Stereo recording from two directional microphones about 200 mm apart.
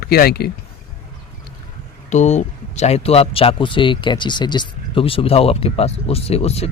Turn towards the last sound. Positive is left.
turn(degrees=30)  # may be behind; listen again after turning